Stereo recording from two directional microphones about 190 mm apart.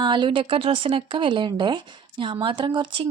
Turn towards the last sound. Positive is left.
turn(degrees=-25)  # may be behind; listen again after turning